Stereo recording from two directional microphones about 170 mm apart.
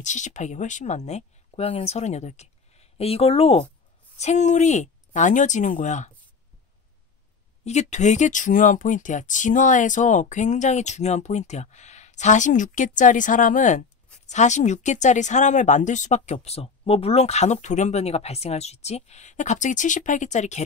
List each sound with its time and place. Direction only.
0.0 s speech: 45° left (ahead or behind)
7.6 s speech: 45° left (ahead or behind)